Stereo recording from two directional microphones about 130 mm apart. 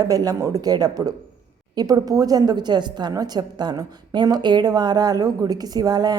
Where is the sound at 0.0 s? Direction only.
25° right (ahead or behind).